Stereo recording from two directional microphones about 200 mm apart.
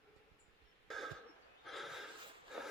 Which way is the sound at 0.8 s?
Centre (ahead or behind).